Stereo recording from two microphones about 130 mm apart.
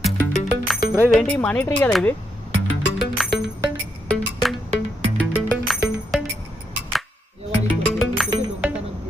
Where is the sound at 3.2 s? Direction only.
Centre (ahead or behind).